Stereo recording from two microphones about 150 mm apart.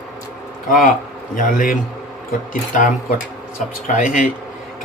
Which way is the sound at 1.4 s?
65° left (ahead or behind).